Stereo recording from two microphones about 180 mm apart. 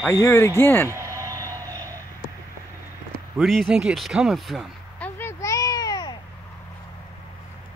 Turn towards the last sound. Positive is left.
turn(degrees=20)  # may be behind; listen again after turning